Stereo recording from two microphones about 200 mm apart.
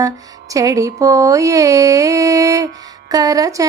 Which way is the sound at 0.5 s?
15° right (ahead or behind).